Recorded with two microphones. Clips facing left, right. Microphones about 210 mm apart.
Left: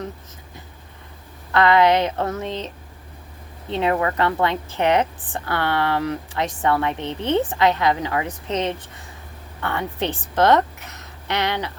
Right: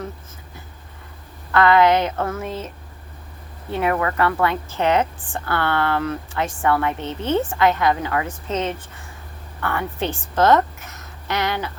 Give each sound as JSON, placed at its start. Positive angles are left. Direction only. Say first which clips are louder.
{"t": 1.5, "sound": "a woman's voice", "louder": "right 1 dB", "side_deg": 20}
{"t": 10.2, "sound": "a woman's voice", "louder": "even", "side_deg": 30}
{"t": 10.9, "sound": "a sound", "louder": "even", "side_deg": 20}